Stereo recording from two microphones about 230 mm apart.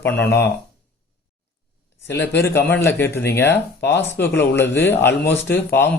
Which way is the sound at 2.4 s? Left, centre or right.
Centre.